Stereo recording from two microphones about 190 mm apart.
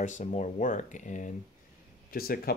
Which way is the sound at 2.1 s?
50° left (ahead or behind).